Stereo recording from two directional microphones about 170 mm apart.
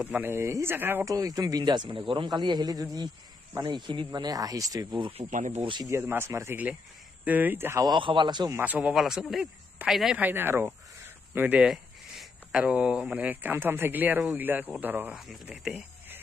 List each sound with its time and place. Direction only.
0.0 s speech: 10° right (ahead or behind); by 5.6 s 45° right (ahead or behind)
5.6 s speech: 25° right (ahead or behind)
8.5 s speech: 10° right (ahead or behind)